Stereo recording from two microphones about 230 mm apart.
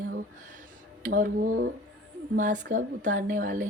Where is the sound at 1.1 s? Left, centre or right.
Right.